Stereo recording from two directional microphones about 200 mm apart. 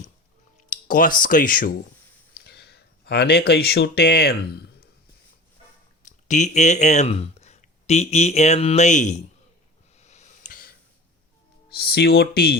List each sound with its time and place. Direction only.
0.7 s speech: 45° left (ahead or behind)
2.3 s speech: 55° left (ahead or behind)
6.0 s speech: 40° left (ahead or behind)
10.0 s a sound: 35° left (ahead or behind)
11.7 s speech: 50° left (ahead or behind)